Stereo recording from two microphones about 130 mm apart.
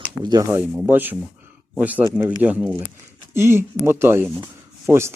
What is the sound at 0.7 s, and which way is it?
Speech, 15° right (ahead or behind).